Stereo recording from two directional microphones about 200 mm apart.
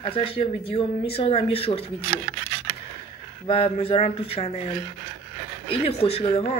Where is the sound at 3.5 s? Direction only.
30° left (ahead or behind).